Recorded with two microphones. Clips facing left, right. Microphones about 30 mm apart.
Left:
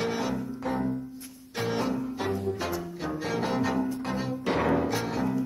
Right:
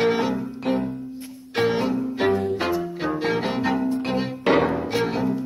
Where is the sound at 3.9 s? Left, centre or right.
Right.